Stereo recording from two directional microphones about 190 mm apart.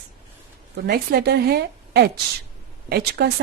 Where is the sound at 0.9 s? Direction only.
60° right (ahead or behind).